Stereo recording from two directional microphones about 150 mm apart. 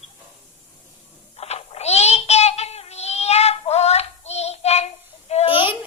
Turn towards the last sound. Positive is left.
turn(degrees=35)  # may be behind; listen again after turning